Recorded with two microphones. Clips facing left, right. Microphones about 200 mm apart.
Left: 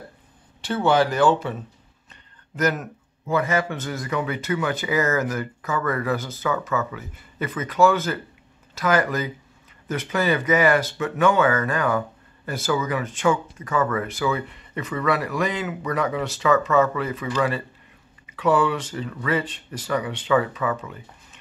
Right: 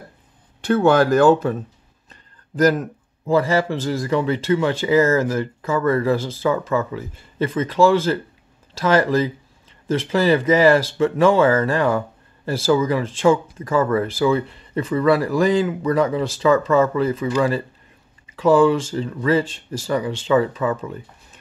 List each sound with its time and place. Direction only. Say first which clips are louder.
0.7 s speech: right 4 dB; 45° right (ahead or behind)
2.0 s a man's voice: right 6 dB; 35° right (ahead or behind)